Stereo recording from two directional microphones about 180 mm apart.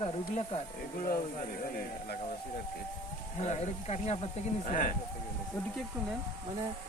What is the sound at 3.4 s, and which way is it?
Speech, 40° left (ahead or behind).